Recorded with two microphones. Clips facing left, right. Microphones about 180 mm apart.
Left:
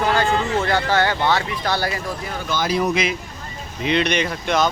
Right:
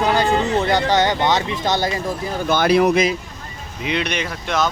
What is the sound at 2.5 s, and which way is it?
Speech, 65° right (ahead or behind).